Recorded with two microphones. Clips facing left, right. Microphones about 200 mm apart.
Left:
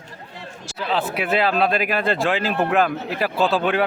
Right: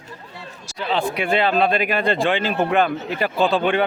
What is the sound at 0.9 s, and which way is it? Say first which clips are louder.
Speech: right 1 dB; 5° left (ahead or behind).